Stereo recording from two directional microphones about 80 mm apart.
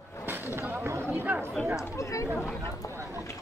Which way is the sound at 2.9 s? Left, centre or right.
Right.